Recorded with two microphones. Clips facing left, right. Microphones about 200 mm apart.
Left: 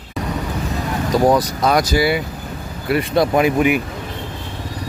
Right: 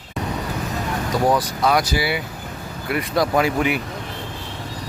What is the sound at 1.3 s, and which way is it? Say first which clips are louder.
Speech: left 3 dB; 40° left (ahead or behind).